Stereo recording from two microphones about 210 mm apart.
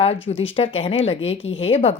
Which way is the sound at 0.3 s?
25° left (ahead or behind).